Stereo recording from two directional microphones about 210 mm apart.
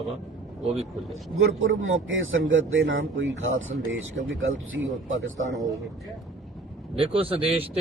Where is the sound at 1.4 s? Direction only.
65° right (ahead or behind).